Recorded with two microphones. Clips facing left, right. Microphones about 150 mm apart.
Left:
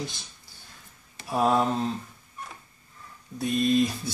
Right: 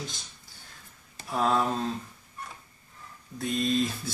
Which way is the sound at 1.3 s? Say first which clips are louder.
Left 3 dB; 15° left (ahead or behind).